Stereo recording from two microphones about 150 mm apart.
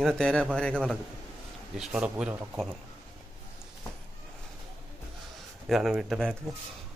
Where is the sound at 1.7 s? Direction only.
5° right (ahead or behind).